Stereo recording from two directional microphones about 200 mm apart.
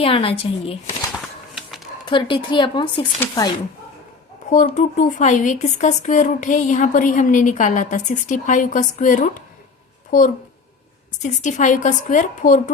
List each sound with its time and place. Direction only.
0.0 s speech: 30° left (ahead or behind)
1.5 s a sound: centre (ahead or behind)
2.0 s speech: 25° left (ahead or behind)
4.4 s a child's voice: 35° left (ahead or behind)